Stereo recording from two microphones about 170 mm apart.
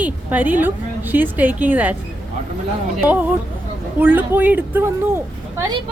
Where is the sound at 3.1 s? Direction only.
10° right (ahead or behind).